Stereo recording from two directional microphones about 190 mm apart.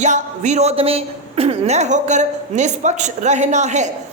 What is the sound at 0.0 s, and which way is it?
Speech, 40° right (ahead or behind).